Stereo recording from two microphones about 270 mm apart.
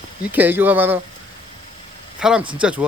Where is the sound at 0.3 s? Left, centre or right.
Centre.